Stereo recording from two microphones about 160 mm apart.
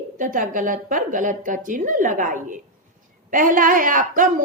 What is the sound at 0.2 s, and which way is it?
Speech, 55° right (ahead or behind).